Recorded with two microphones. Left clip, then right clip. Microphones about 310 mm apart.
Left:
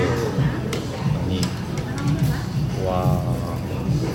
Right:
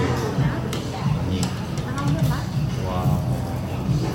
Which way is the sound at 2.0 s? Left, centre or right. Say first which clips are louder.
Right 2 dB; centre.